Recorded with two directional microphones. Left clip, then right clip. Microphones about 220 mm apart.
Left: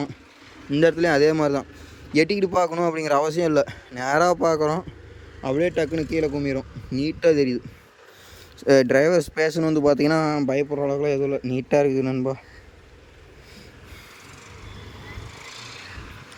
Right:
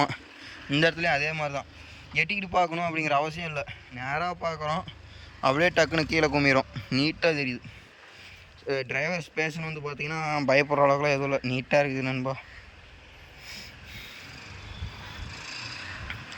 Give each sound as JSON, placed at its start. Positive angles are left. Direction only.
{"t": 0.7, "sound": "speech", "side_deg": 15}
{"t": 5.4, "sound": "a man's voice", "side_deg": 10}
{"t": 8.9, "sound": "speech", "side_deg": 25}
{"t": 10.2, "sound": "a man's voice", "side_deg": 15}
{"t": 15.4, "sound": "a sound", "side_deg": 25}